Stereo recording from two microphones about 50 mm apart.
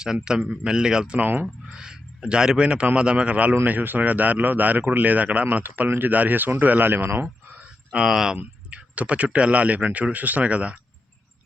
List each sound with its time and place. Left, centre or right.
0.0 s speech: centre
1.2 s speech: right
1.6 s speech: centre; by 7.1 s right
7.4 s a sound: right
8.0 s speech: centre
8.7 s speech: right